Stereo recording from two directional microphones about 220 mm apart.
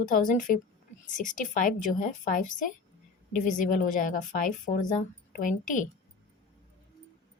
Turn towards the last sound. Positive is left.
turn(degrees=35)  # may be behind; listen again after turning